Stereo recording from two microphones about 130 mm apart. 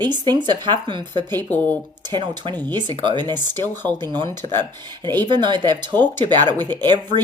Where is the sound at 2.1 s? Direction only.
35° right (ahead or behind).